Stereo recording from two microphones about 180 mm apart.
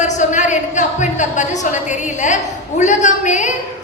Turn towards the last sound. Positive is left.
turn(degrees=40)  # may be behind; listen again after turning